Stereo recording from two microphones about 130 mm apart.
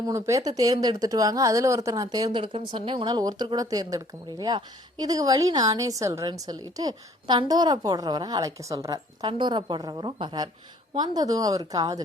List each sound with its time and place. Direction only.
0.0 s speech: 25° right (ahead or behind)